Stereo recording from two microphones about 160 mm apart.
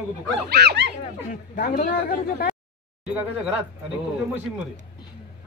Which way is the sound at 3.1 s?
5° right (ahead or behind).